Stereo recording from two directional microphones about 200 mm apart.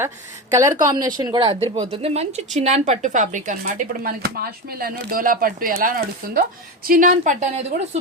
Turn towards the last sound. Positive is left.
turn(degrees=-30)  # may be behind; listen again after turning